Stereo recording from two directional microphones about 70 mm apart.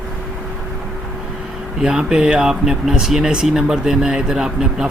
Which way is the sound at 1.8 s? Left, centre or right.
Centre.